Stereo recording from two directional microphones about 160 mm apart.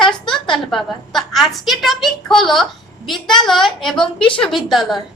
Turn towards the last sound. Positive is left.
turn(degrees=0)  # may be behind; listen again after turning